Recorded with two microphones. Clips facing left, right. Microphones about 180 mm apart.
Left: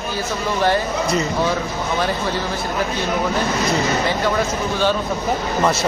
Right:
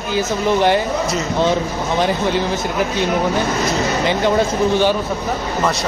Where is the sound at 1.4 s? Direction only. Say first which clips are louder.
Right 3 dB; 25° right (ahead or behind).